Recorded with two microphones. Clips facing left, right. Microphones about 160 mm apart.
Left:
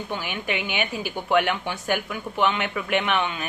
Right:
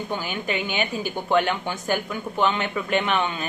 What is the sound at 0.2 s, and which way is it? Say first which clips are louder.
Speech: right 1 dB; 35° right (ahead or behind).